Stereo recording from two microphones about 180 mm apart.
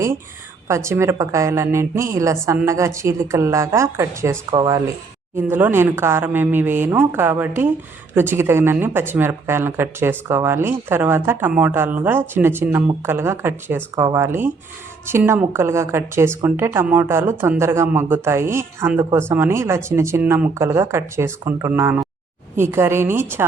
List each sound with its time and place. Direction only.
0.7 s a woman's voice: 15° right (ahead or behind)